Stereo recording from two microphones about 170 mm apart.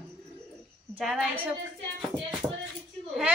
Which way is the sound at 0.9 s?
5° right (ahead or behind).